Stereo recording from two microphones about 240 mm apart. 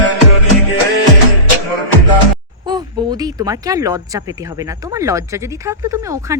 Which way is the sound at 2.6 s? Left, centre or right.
Centre.